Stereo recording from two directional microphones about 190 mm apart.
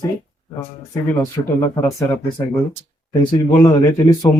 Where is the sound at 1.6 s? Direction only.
15° left (ahead or behind).